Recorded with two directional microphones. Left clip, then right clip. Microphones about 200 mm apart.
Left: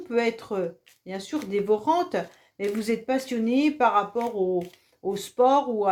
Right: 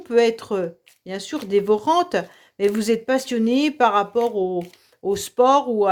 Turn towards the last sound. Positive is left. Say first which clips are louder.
# right 4 dB
turn(degrees=-45)  # may be behind; listen again after turning